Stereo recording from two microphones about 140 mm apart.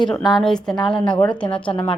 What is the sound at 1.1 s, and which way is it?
Speech, 30° left (ahead or behind).